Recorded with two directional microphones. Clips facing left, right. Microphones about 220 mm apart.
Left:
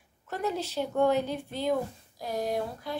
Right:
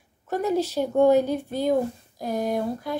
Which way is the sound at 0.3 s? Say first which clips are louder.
Right 8 dB; 45° right (ahead or behind).